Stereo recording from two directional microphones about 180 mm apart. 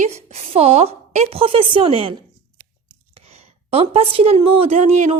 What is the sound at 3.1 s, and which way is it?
A woman's voice, 35° right (ahead or behind).